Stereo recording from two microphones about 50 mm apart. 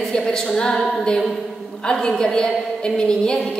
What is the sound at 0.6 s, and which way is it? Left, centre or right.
A woman's voice, centre.